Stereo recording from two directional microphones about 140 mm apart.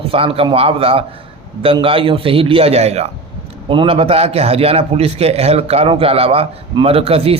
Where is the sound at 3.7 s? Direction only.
40° right (ahead or behind).